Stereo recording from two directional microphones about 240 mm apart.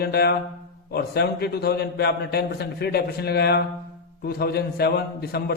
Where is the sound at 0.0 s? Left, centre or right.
Left.